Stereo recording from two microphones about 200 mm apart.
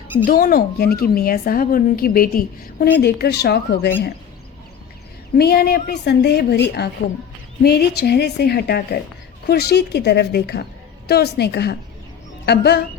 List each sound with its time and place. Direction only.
0.3 s a woman's voice: 45° left (ahead or behind)
5.4 s a woman's voice: 50° left (ahead or behind)